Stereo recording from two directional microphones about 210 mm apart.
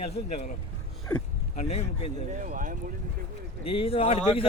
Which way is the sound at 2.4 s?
40° right (ahead or behind).